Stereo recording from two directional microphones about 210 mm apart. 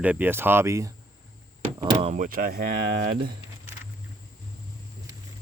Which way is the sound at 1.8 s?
30° right (ahead or behind).